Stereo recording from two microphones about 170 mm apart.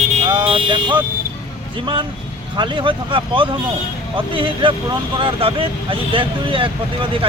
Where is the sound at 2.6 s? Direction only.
30° right (ahead or behind).